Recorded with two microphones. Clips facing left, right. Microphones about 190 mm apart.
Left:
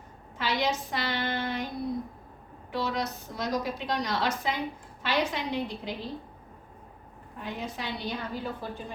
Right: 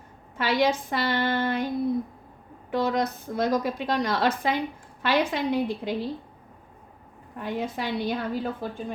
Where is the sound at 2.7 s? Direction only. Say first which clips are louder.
Right 6 dB; 50° right (ahead or behind).